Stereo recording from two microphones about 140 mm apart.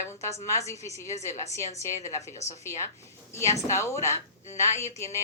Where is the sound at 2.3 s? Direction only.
55° left (ahead or behind).